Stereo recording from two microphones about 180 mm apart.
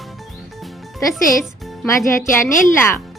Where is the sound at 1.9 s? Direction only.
15° left (ahead or behind).